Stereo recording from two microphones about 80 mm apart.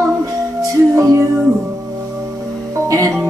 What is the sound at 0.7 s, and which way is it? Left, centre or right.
Music, right.